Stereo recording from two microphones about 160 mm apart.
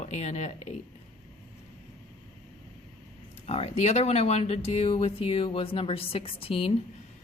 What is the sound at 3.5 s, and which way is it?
Speech, 40° left (ahead or behind).